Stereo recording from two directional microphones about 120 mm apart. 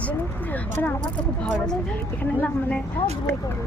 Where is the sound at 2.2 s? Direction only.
10° left (ahead or behind).